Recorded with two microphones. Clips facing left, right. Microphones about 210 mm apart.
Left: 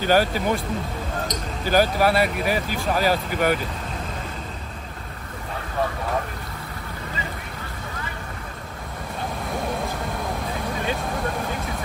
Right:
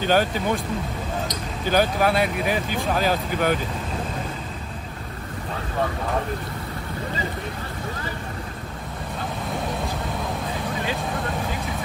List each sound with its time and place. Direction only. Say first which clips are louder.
0.0 s speech: left 1 dB; 10° left (ahead or behind)
1.7 s speech: left 1 dB; 5° left (ahead or behind)